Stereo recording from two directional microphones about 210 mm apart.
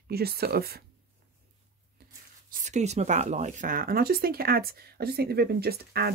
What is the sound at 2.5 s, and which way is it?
Speech, 35° right (ahead or behind).